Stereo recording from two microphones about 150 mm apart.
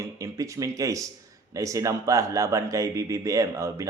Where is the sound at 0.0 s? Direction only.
20° right (ahead or behind).